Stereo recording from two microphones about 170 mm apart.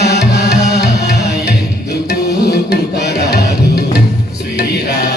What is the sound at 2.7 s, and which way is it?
Music, 75° left (ahead or behind).